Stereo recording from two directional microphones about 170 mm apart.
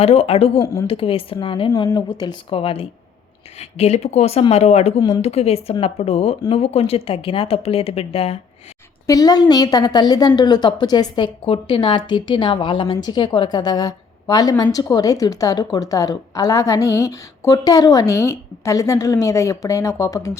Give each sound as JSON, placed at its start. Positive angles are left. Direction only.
{"t": 0.0, "sound": "a woman's voice", "side_deg": 35}
{"t": 9.0, "sound": "a woman's voice", "side_deg": 20}